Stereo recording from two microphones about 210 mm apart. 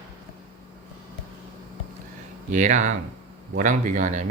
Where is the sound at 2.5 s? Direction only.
35° right (ahead or behind).